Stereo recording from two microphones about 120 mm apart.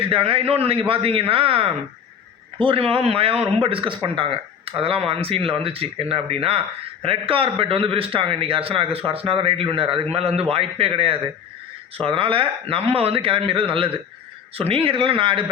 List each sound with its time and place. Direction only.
0.0 s speech: 50° right (ahead or behind)
10.2 s a man's voice: 60° right (ahead or behind)